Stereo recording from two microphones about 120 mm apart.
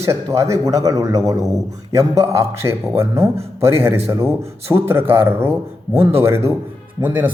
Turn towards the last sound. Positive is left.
turn(degrees=-15)  # may be behind; listen again after turning